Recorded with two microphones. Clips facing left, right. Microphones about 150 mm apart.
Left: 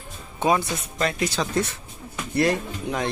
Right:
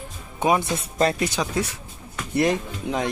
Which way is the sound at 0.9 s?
35° right (ahead or behind).